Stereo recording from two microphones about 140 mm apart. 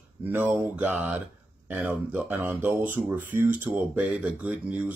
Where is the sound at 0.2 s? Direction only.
15° right (ahead or behind).